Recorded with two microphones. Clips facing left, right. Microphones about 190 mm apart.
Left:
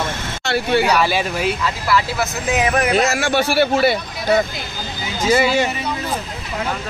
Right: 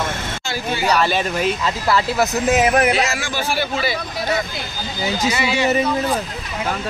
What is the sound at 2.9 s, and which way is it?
A man's voice, 50° left (ahead or behind).